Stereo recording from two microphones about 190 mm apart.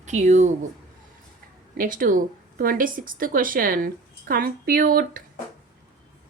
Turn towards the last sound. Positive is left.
turn(degrees=-50)  # may be behind; listen again after turning